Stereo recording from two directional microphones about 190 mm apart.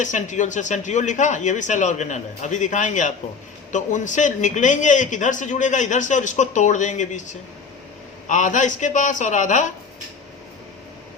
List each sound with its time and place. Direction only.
0.0 s a man's voice: 40° left (ahead or behind)